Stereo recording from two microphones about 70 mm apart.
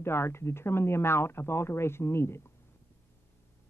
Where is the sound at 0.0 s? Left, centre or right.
Left.